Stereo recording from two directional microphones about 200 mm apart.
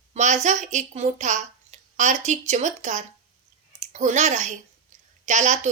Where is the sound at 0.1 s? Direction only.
35° right (ahead or behind).